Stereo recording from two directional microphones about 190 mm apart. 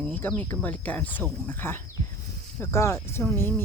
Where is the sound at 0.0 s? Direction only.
10° left (ahead or behind).